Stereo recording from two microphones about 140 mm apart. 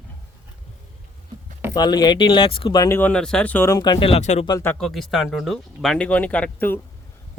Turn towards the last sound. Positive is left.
turn(degrees=10)  # may be behind; listen again after turning